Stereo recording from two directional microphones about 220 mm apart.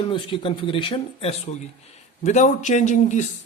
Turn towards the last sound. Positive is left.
turn(degrees=35)  # may be behind; listen again after turning